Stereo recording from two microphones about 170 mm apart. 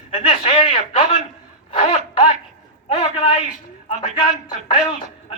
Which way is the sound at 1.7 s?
35° left (ahead or behind).